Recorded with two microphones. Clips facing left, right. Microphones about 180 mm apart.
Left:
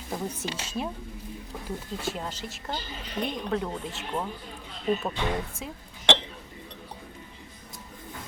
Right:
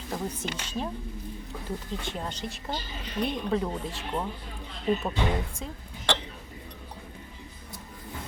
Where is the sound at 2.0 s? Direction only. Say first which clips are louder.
Left 1 dB; 5° left (ahead or behind).